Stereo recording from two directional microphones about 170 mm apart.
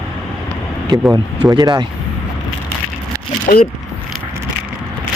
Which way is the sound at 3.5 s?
55° left (ahead or behind).